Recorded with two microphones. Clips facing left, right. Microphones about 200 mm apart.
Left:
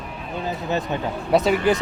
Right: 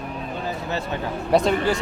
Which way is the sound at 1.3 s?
5° left (ahead or behind).